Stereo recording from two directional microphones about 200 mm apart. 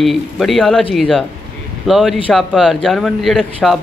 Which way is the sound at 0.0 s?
Centre (ahead or behind).